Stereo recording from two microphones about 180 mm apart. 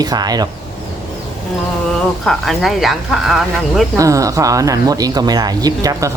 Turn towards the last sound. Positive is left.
turn(degrees=-20)  # may be behind; listen again after turning